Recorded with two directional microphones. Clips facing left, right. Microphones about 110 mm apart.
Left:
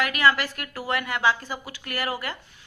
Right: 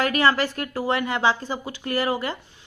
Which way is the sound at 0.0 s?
30° right (ahead or behind).